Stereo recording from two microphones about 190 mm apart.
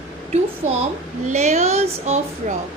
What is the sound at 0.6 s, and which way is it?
A woman's voice, 35° right (ahead or behind).